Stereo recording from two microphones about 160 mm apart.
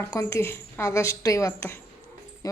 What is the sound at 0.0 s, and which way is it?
A woman's voice, 20° left (ahead or behind).